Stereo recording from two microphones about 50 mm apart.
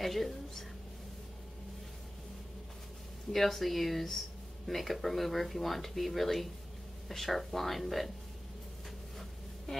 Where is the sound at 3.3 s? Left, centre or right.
Centre.